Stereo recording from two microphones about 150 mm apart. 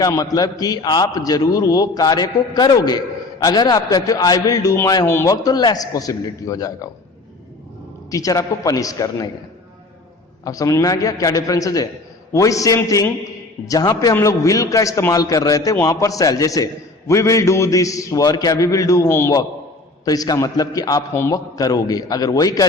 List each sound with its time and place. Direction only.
0.0 s a man's voice: 25° left (ahead or behind)
8.1 s a man's voice: 20° left (ahead or behind)
10.4 s a man's voice: 25° left (ahead or behind)